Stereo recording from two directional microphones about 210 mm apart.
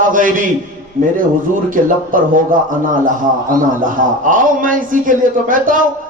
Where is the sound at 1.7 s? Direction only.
40° right (ahead or behind).